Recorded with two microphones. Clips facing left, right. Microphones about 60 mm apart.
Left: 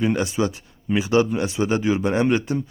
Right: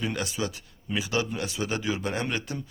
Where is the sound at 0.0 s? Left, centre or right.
Left.